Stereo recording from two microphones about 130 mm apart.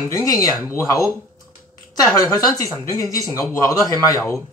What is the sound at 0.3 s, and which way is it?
Speech, 25° left (ahead or behind).